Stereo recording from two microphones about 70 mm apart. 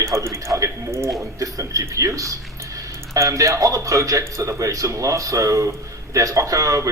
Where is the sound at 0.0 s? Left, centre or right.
Right.